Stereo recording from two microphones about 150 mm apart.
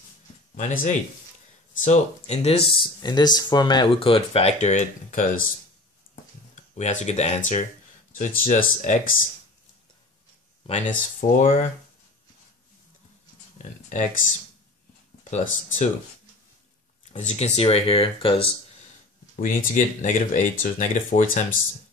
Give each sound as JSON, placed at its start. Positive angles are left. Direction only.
{"t": 0.6, "sound": "speech", "side_deg": 55}
{"t": 3.0, "sound": "speech", "side_deg": 30}
{"t": 6.5, "sound": "speech", "side_deg": 50}
{"t": 10.7, "sound": "speech", "side_deg": 60}
{"t": 13.6, "sound": "speech", "side_deg": 50}
{"t": 15.2, "sound": "speech", "side_deg": 50}
{"t": 17.2, "sound": "speech", "side_deg": 50}
{"t": 19.4, "sound": "speech", "side_deg": 60}